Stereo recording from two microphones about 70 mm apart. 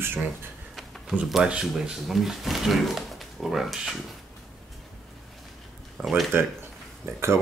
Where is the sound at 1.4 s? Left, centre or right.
Centre.